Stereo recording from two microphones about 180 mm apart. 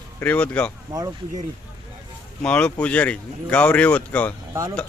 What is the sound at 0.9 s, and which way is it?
Speech, 15° right (ahead or behind).